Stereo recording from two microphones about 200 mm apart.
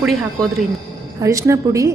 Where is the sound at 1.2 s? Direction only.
15° right (ahead or behind).